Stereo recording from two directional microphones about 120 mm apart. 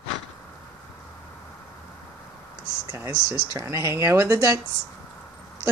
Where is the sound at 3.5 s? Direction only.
25° right (ahead or behind).